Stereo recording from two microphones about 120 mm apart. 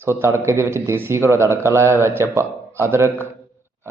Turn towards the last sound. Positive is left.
turn(degrees=-20)  # may be behind; listen again after turning